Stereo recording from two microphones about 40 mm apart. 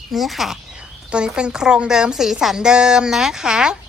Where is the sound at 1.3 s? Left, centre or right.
Right.